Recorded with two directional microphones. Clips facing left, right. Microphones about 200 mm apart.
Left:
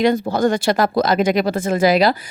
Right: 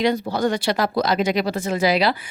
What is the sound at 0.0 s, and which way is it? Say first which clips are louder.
Speech: left 4 dB; 50° left (ahead or behind).